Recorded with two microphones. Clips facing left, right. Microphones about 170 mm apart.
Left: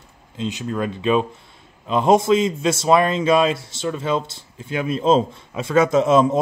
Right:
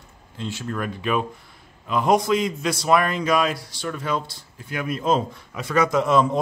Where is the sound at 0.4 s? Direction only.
20° left (ahead or behind).